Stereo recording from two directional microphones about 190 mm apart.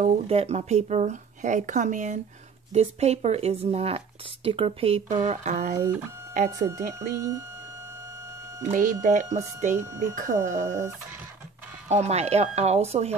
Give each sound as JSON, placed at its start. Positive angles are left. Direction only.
{"t": 0.0, "sound": "speech", "side_deg": -35}
{"t": 5.8, "sound": "speech", "side_deg": -10}
{"t": 8.6, "sound": "speech", "side_deg": -45}
{"t": 11.9, "sound": "speech", "side_deg": -35}